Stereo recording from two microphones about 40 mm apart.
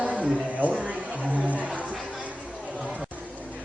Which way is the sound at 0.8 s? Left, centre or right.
Right.